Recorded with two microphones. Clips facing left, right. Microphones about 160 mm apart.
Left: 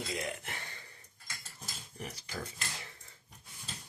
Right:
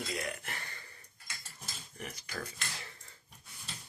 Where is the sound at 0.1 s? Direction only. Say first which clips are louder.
Even; 20° left (ahead or behind).